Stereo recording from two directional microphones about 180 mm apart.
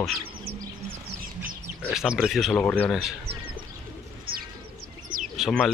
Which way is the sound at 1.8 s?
5° right (ahead or behind).